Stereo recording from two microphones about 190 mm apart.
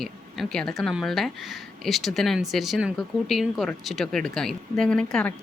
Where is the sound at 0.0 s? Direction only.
Centre (ahead or behind).